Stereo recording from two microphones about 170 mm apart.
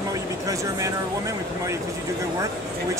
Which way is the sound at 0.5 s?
20° right (ahead or behind).